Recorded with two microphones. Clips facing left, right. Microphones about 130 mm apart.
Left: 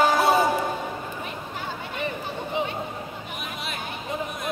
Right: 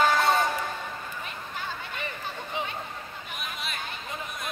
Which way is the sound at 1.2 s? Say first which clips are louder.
Left 3 dB; 15° left (ahead or behind).